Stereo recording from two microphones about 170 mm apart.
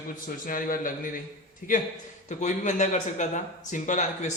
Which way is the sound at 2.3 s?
45° left (ahead or behind).